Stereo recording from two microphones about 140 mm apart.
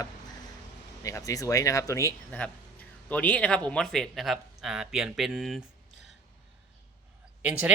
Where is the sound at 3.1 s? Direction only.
10° left (ahead or behind).